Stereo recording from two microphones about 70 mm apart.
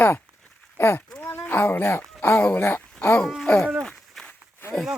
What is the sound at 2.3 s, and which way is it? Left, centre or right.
Speech, centre.